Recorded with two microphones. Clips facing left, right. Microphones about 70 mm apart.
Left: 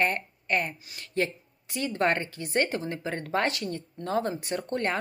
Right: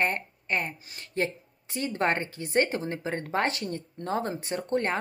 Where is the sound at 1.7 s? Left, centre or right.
Right.